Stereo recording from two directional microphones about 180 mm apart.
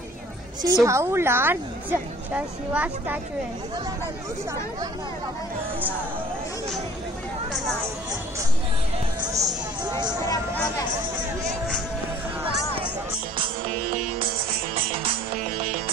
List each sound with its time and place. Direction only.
0.6 s a woman's voice: 20° right (ahead or behind)
9.2 s music: 20° right (ahead or behind)
14.9 s music: 30° right (ahead or behind)